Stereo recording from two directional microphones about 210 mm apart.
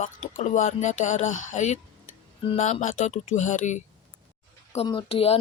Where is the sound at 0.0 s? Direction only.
40° left (ahead or behind).